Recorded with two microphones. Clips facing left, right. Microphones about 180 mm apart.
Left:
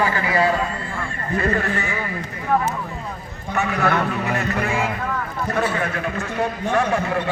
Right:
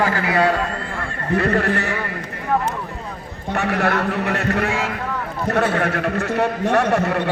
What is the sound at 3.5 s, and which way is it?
A man's voice, 65° right (ahead or behind).